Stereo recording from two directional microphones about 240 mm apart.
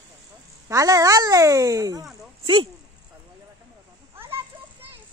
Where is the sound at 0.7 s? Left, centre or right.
Centre.